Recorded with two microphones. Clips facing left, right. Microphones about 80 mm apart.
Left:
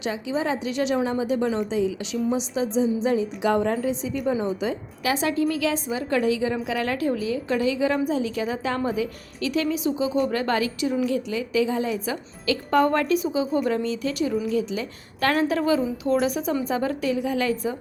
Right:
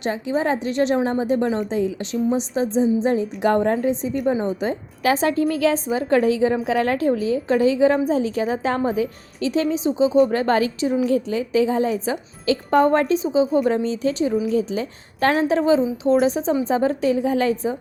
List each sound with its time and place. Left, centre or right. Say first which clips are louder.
0.0 s a woman's voice: right 4 dB; right